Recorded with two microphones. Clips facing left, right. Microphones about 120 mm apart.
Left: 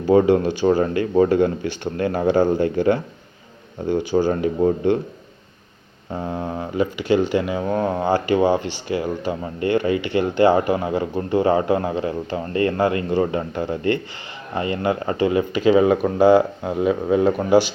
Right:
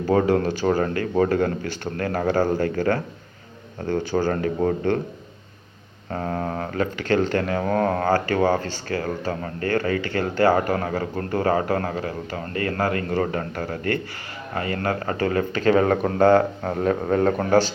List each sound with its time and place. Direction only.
0.1 s speech: 20° left (ahead or behind)
6.1 s speech: 10° left (ahead or behind)